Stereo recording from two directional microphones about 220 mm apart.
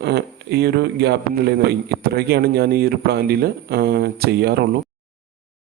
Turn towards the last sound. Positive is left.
turn(degrees=-50)  # may be behind; listen again after turning